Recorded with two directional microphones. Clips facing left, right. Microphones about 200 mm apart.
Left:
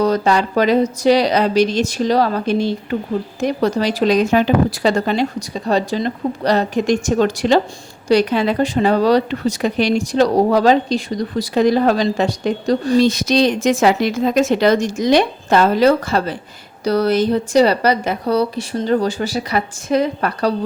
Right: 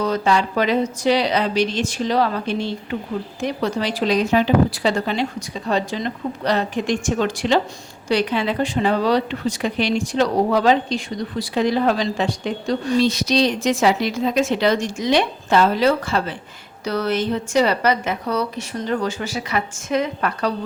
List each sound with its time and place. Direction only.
0.0 s speech: 40° left (ahead or behind)